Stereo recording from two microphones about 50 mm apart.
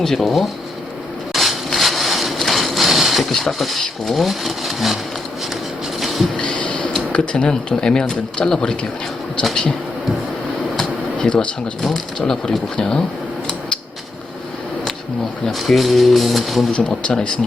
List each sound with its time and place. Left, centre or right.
0.0 s speech: centre
1.3 s a sound: centre
3.3 s speech: centre
6.0 s a sound: centre
6.3 s a sound: centre
7.1 s speech: left
9.4 s speech: centre
10.8 s air conditioning: centre
12.2 s speech: centre
15.4 s speech: centre
16.7 s speech: left